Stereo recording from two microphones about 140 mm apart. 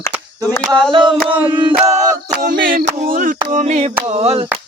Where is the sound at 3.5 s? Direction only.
55° right (ahead or behind).